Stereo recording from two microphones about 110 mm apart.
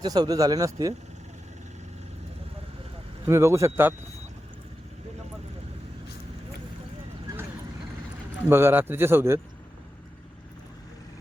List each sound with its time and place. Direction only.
0.0 s speech: 40° right (ahead or behind)
3.2 s a man's voice: 25° right (ahead or behind)
8.4 s a man's voice: 20° right (ahead or behind)